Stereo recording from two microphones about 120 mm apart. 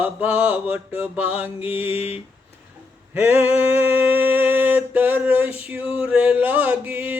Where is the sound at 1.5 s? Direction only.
55° left (ahead or behind).